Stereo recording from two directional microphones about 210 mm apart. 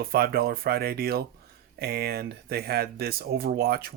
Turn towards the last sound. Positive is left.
turn(degrees=-45)  # may be behind; listen again after turning